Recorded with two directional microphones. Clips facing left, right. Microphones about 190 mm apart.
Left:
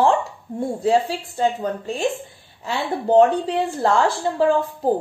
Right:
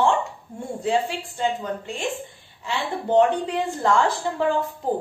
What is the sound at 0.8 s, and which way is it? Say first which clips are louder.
A woman's voice: left 4 dB; 40° left (ahead or behind).